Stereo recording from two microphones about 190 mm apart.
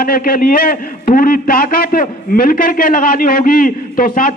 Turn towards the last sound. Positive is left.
turn(degrees=50)  # may be behind; listen again after turning